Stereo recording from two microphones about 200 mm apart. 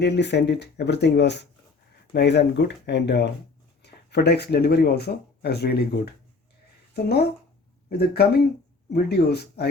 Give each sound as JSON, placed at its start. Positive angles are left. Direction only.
{"t": 0.0, "sound": "speech", "side_deg": 60}